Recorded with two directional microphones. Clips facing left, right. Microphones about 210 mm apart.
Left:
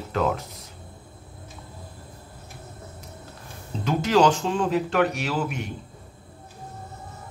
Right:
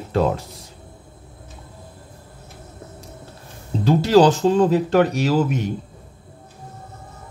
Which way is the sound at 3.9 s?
35° right (ahead or behind).